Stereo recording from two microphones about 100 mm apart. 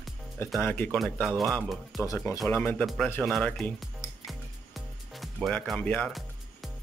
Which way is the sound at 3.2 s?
Centre (ahead or behind).